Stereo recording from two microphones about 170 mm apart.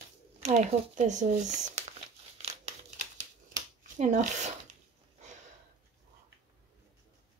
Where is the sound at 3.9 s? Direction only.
45° right (ahead or behind).